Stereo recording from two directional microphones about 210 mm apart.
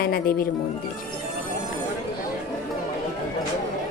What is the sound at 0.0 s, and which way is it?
Speech, 45° left (ahead or behind).